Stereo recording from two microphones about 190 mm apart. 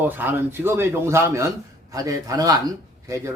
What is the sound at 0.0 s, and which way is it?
A man's voice, 10° right (ahead or behind).